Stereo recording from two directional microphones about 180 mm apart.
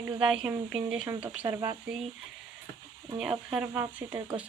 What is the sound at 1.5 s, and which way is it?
Speech, 25° right (ahead or behind).